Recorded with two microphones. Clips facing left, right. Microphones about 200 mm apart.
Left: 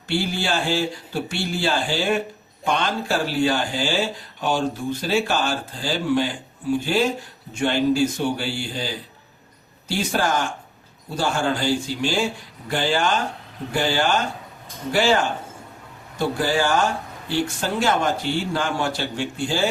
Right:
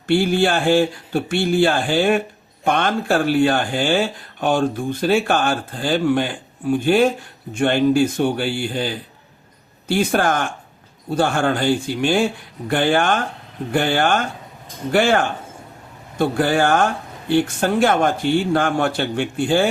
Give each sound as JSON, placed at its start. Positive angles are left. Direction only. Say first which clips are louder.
{"t": 0.1, "sound": "speech", "louder": "right 7 dB", "side_deg": -55}